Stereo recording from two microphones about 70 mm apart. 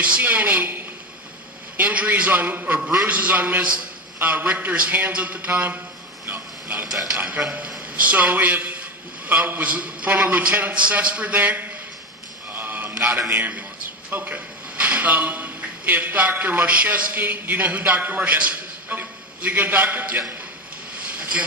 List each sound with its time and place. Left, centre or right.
0.0 s a man's voice: centre
6.2 s a sound: right
7.2 s a man's voice: centre
12.5 s a sound: right
13.2 s a man's voice: right
14.1 s a man's voice: right